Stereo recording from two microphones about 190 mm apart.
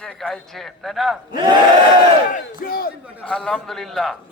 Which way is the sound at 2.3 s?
50° left (ahead or behind).